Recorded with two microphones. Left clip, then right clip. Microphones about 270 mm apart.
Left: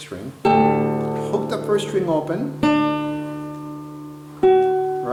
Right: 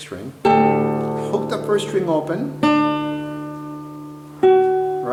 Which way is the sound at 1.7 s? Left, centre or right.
Centre.